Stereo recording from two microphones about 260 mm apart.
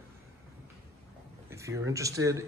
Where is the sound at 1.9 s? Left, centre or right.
Centre.